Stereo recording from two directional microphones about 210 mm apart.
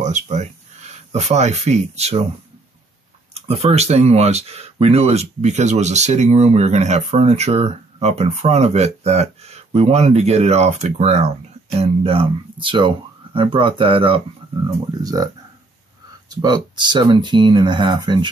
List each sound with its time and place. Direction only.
0.0 s speech: 35° right (ahead or behind)
3.3 s speech: 30° right (ahead or behind)
16.3 s speech: 20° right (ahead or behind)